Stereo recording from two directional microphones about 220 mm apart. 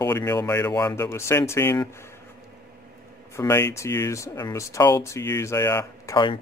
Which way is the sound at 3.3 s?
15° left (ahead or behind).